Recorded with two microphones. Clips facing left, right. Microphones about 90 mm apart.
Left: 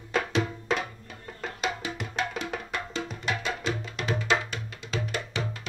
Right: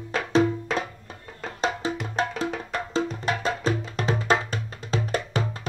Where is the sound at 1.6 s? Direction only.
35° right (ahead or behind).